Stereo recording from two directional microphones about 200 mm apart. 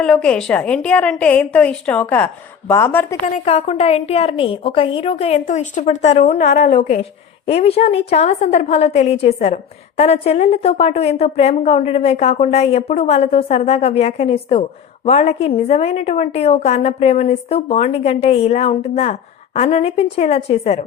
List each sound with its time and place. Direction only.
0.0 s a woman's voice: 5° left (ahead or behind)
3.2 s a woman's voice: 35° left (ahead or behind)